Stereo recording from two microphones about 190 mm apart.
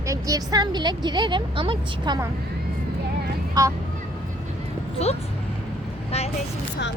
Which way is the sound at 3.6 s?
20° right (ahead or behind).